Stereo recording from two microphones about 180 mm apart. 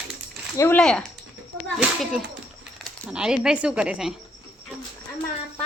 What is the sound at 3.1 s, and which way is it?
A woman's voice, 5° right (ahead or behind).